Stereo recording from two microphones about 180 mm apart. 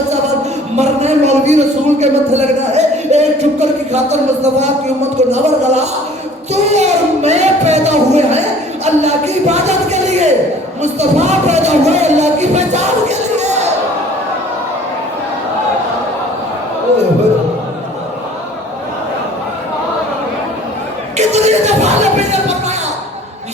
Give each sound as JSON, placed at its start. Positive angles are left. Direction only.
{"t": 0.8, "sound": "a sound", "side_deg": -40}
{"t": 10.9, "sound": "music", "side_deg": -40}
{"t": 21.2, "sound": "music", "side_deg": -40}